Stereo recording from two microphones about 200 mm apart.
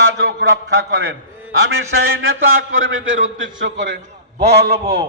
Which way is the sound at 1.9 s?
85° right.